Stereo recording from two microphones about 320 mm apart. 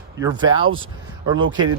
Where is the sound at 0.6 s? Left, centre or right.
Right.